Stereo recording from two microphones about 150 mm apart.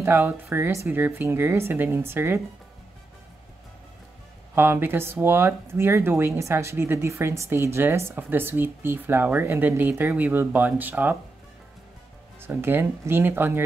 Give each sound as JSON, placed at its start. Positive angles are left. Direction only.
{"t": 0.0, "sound": "speech", "side_deg": -15}
{"t": 4.6, "sound": "speech", "side_deg": -15}
{"t": 12.4, "sound": "speech", "side_deg": -15}